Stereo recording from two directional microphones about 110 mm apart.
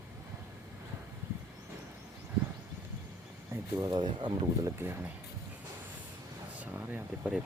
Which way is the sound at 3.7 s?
35° right (ahead or behind).